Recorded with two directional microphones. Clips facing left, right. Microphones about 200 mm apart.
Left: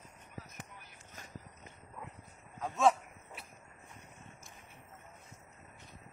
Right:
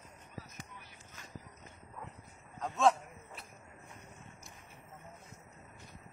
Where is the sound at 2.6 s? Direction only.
5° left (ahead or behind).